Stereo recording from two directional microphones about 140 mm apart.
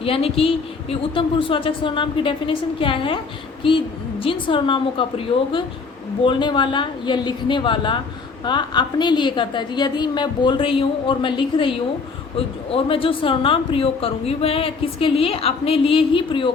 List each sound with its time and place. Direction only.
0.0 s speech: 45° left (ahead or behind)
12.7 s speech: 40° left (ahead or behind)